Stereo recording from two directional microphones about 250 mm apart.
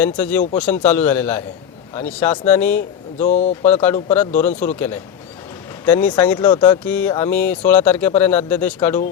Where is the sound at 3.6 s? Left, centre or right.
Centre.